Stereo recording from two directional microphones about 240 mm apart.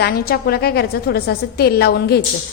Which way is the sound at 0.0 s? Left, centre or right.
Left.